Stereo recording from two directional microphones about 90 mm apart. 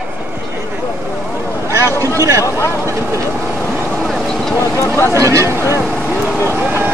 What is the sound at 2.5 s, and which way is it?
Speech, 30° left (ahead or behind).